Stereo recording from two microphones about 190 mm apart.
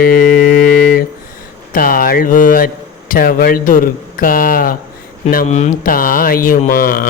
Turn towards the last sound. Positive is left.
turn(degrees=50)  # may be behind; listen again after turning